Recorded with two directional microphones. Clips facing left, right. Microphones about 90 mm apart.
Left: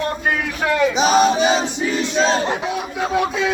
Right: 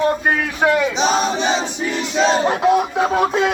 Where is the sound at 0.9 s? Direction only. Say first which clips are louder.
Left 3 dB; 5° left (ahead or behind).